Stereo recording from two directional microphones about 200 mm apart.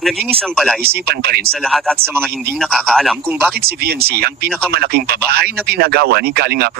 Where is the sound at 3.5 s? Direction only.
50° right (ahead or behind).